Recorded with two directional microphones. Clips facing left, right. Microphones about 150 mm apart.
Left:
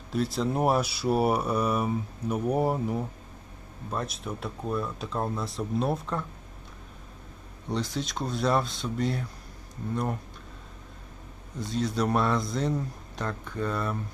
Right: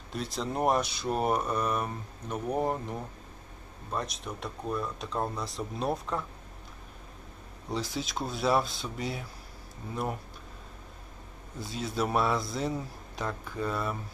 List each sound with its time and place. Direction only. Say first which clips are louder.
0.1 s a man's voice: left 6 dB; centre (ahead or behind)
7.7 s a man's voice: left 3 dB; centre (ahead or behind)
11.6 s a man's voice: left 4 dB; 5° right (ahead or behind)